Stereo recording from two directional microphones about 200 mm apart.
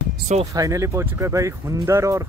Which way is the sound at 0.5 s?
15° right (ahead or behind).